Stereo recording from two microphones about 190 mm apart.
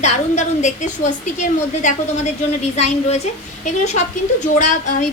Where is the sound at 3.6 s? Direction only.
35° left (ahead or behind).